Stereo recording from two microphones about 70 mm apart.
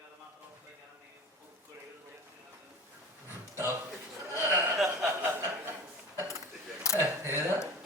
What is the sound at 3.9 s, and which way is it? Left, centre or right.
Chuckle, right.